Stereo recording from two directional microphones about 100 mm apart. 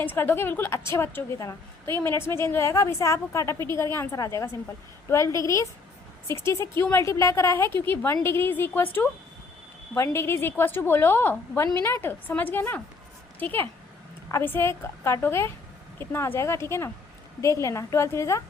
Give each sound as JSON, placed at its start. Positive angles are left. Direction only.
{"t": 0.0, "sound": "a woman's voice", "side_deg": 20}
{"t": 9.9, "sound": "a woman's voice", "side_deg": 25}